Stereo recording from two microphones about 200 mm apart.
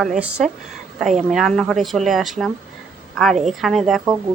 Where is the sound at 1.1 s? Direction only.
35° right (ahead or behind).